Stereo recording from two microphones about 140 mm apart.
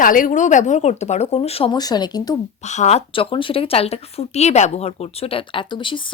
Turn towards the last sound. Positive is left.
turn(degrees=35)  # may be behind; listen again after turning